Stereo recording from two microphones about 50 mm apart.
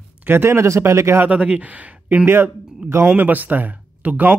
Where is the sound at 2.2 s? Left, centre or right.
Right.